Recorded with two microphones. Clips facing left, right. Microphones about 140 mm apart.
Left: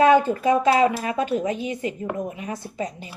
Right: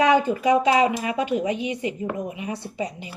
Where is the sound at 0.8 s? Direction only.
45° left (ahead or behind).